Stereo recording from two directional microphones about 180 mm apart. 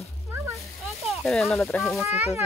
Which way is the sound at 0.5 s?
Centre (ahead or behind).